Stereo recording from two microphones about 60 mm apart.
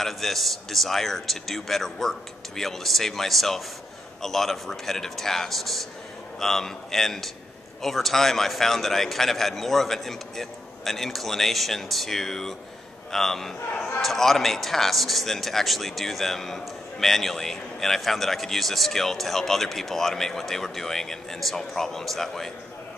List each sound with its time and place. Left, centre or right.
0.0 s a man's voice: centre
13.7 s a man's voice: left
14.0 s speech: centre